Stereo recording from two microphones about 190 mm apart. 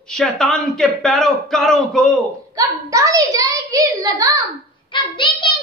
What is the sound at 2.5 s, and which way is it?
A child's voice, 15° right (ahead or behind).